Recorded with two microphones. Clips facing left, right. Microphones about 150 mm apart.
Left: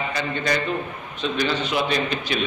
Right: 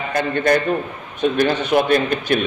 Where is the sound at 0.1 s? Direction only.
50° right (ahead or behind).